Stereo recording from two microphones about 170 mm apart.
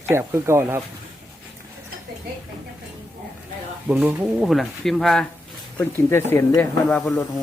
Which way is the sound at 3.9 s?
5° right (ahead or behind).